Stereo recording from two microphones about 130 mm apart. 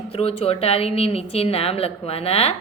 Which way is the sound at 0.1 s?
50° left (ahead or behind).